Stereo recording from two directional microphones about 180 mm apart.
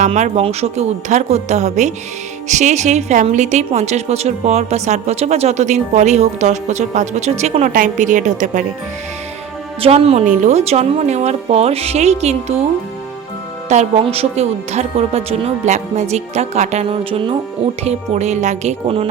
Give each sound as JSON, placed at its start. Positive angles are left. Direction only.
{"t": 0.0, "sound": "a woman's voice", "side_deg": -40}
{"t": 9.8, "sound": "a woman's voice", "side_deg": -35}
{"t": 13.7, "sound": "a woman's voice", "side_deg": -35}